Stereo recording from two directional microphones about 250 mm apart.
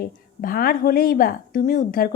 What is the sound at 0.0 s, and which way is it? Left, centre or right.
A woman's voice, left.